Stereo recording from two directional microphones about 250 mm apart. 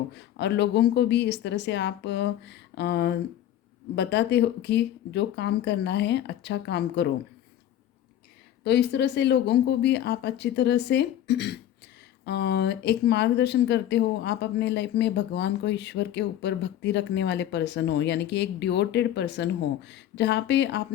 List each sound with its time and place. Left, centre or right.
0.1 s speech: left
8.6 s speech: left